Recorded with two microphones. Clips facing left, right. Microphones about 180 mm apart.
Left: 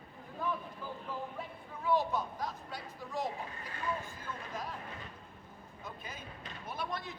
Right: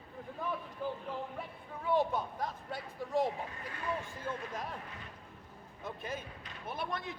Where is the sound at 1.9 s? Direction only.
55° right (ahead or behind).